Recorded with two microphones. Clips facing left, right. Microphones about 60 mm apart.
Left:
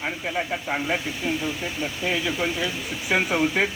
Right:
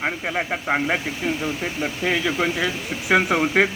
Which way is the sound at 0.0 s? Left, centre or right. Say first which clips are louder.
Right 3 dB; right.